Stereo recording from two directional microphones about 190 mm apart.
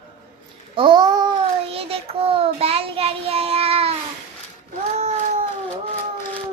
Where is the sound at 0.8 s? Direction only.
25° right (ahead or behind).